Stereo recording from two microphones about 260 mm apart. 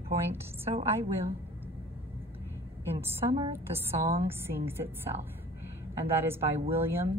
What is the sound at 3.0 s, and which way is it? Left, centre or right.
A woman's voice, centre.